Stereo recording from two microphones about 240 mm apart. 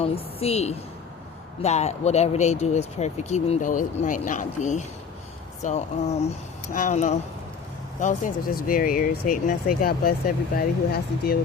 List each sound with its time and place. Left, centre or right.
0.0 s speech: left